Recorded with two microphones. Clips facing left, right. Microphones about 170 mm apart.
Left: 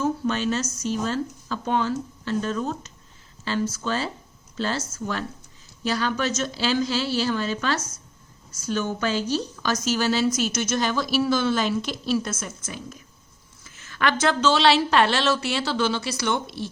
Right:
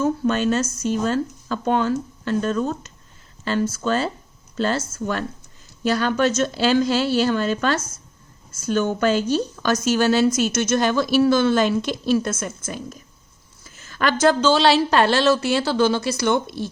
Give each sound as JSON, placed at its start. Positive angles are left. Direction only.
{"t": 0.0, "sound": "a woman's voice", "side_deg": -50}